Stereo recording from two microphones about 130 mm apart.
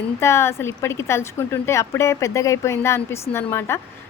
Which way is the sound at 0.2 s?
20° left (ahead or behind).